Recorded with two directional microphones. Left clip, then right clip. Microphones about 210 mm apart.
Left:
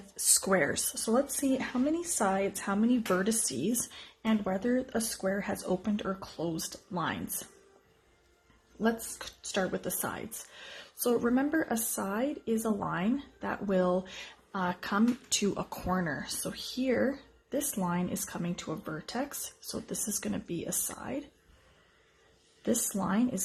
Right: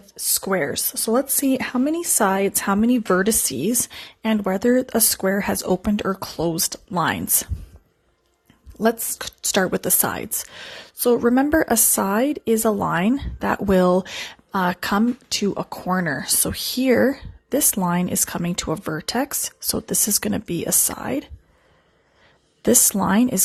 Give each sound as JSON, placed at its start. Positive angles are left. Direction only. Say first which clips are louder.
{"t": 0.3, "sound": "a woman's voice", "louder": "right 6 dB", "side_deg": -30}
{"t": 8.8, "sound": "a woman's voice", "louder": "right 11 dB", "side_deg": -45}
{"t": 15.3, "sound": "a woman's voice", "louder": "right 8 dB", "side_deg": -30}
{"t": 22.6, "sound": "a woman's voice", "louder": "right 13 dB", "side_deg": -45}